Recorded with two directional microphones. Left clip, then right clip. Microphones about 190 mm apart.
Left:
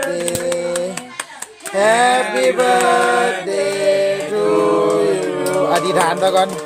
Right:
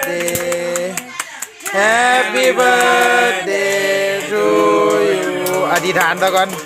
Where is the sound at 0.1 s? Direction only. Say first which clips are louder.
Right 1 dB; 20° right (ahead or behind).